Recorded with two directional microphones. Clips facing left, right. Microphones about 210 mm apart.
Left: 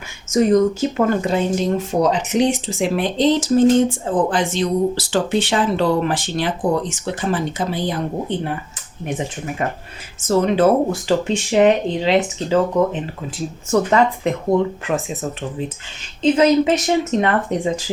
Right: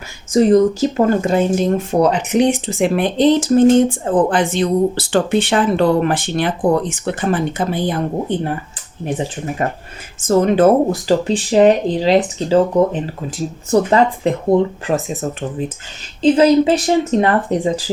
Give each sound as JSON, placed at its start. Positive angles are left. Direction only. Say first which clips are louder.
{"t": 0.3, "sound": "speech", "louder": "right 3 dB", "side_deg": -35}
{"t": 1.9, "sound": "speech", "louder": "right 3 dB", "side_deg": -60}
{"t": 10.2, "sound": "speech", "louder": "right 3 dB", "side_deg": -50}
{"t": 16.2, "sound": "speech", "louder": "right 3 dB", "side_deg": -35}